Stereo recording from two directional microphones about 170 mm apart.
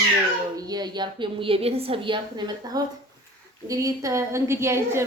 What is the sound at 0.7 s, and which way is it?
A woman's voice, 25° right (ahead or behind).